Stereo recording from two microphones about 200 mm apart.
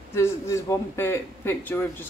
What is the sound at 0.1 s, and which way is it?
A man's voice, 15° left (ahead or behind).